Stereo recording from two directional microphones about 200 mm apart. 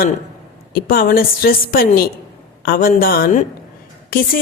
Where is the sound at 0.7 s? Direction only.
45° left (ahead or behind).